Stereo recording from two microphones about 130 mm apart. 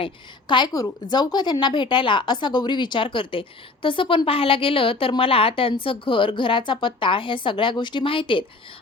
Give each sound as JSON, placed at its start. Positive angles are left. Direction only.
{"t": 0.0, "sound": "speech", "side_deg": 35}